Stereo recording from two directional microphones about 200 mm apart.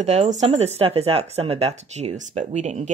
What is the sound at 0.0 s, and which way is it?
Speech, 35° right (ahead or behind).